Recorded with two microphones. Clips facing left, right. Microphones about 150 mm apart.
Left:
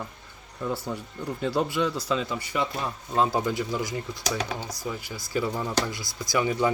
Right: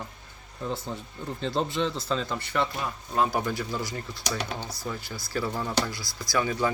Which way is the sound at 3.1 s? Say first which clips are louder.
Left 2 dB; 25° left (ahead or behind).